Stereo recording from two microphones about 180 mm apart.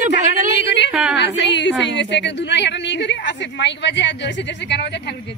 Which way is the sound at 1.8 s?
80° left.